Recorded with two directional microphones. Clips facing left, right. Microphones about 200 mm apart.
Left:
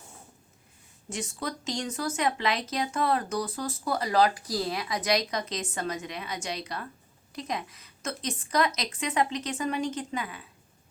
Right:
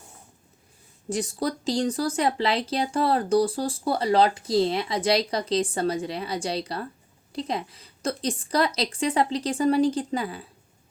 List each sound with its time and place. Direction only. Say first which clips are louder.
1.1 s speech: right 7 dB; 35° right (ahead or behind)